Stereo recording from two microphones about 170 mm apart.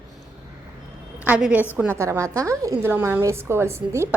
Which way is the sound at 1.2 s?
10° right (ahead or behind).